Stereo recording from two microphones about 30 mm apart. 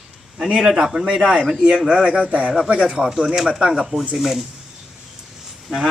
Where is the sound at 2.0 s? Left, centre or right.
Right.